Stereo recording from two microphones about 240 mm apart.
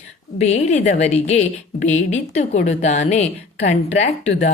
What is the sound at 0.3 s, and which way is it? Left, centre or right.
Speech, left.